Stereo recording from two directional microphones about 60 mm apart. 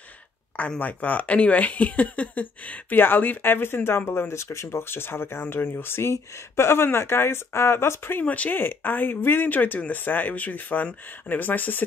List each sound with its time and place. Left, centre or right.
0.6 s speech: left
8.2 s speech: left